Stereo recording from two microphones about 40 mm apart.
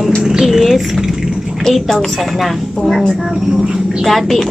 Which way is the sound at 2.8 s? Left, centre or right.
Centre.